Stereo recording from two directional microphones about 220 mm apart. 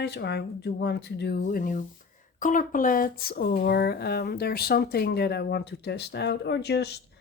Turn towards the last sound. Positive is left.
turn(degrees=50)  # may be behind; listen again after turning